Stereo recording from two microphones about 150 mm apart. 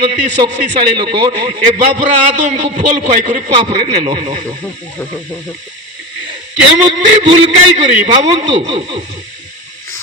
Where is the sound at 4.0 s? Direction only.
45° right (ahead or behind).